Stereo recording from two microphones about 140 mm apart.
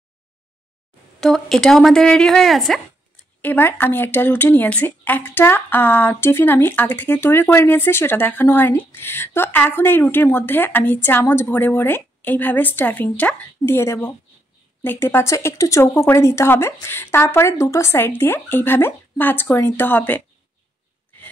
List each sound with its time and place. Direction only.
1.2 s speech: 5° left (ahead or behind)
3.4 s speech: 15° left (ahead or behind)